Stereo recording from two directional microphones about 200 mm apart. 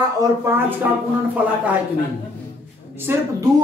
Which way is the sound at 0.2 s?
10° right (ahead or behind).